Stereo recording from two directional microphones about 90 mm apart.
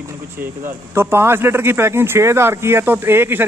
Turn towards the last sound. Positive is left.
turn(degrees=-25)  # may be behind; listen again after turning